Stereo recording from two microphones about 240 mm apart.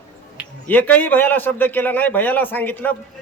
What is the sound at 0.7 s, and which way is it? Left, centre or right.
A man's voice, centre.